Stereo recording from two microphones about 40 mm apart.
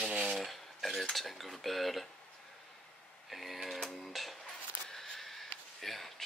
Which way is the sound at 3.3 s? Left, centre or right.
Centre.